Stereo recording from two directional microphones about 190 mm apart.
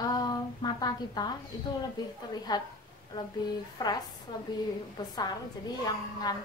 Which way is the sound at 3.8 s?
20° left (ahead or behind).